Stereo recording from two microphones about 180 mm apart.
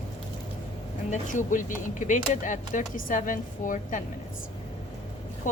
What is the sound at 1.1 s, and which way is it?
Speech, 45° left (ahead or behind).